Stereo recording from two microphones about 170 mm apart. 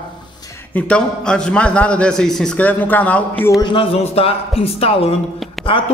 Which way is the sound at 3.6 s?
30° left (ahead or behind).